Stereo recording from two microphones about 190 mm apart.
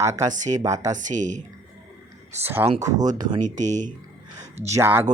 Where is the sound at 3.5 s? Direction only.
40° right (ahead or behind).